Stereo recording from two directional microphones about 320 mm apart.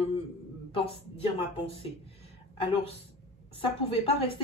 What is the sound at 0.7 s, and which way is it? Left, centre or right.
Speech, centre.